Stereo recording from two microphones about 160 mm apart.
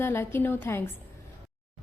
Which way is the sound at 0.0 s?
15° left (ahead or behind).